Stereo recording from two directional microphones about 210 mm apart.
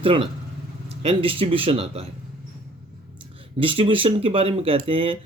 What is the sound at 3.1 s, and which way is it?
Speech, 25° right (ahead or behind).